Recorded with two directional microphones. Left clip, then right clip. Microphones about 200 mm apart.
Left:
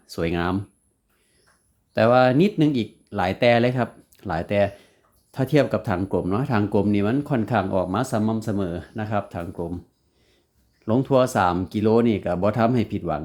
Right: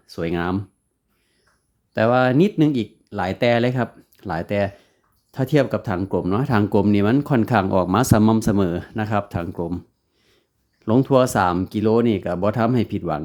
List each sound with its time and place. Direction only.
0.0 s speech: 10° right (ahead or behind)
1.9 s speech: 10° right (ahead or behind)
10.8 s speech: 15° right (ahead or behind)